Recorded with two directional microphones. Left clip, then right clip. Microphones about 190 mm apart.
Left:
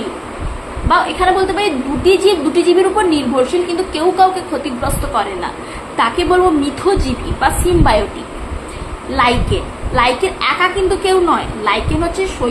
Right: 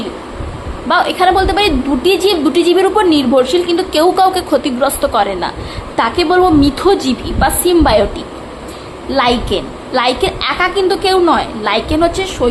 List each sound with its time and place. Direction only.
0.9 s a woman's voice: 50° right (ahead or behind)
3.9 s a woman's voice: 55° right (ahead or behind)
9.1 s a woman's voice: 45° right (ahead or behind)